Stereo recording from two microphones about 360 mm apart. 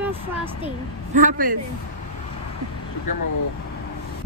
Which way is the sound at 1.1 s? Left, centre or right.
Right.